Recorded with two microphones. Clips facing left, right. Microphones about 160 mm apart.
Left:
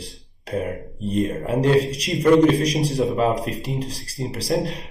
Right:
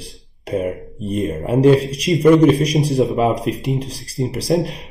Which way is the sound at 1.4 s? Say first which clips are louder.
Right 7 dB; 15° right (ahead or behind).